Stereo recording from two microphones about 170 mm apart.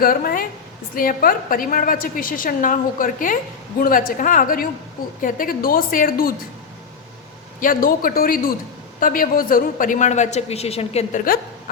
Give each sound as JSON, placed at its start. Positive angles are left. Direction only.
{"t": 0.0, "sound": "a woman's voice", "side_deg": 60}
{"t": 7.6, "sound": "a woman's voice", "side_deg": 55}